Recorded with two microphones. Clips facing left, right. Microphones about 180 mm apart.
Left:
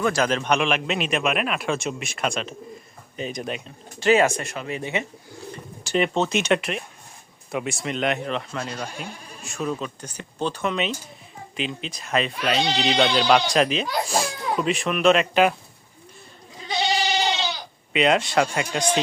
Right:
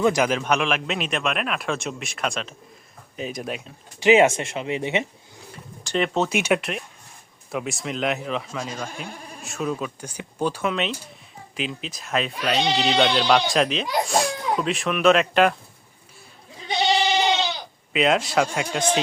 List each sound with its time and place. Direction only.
0.0 s speech: 15° right (ahead or behind)
4.0 s speech: 20° right (ahead or behind)
5.8 s speech: 5° left (ahead or behind)
6.1 s speech: 10° right (ahead or behind)
17.9 s speech: centre (ahead or behind)